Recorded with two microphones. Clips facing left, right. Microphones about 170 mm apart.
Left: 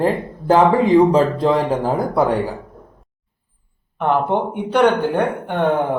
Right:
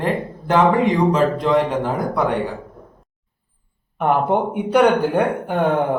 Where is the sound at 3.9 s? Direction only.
10° right (ahead or behind).